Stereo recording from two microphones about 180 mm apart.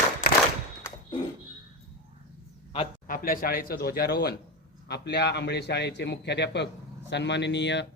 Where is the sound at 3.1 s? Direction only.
55° left (ahead or behind).